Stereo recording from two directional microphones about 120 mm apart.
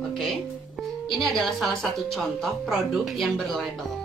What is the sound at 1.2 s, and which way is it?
Speech, centre (ahead or behind).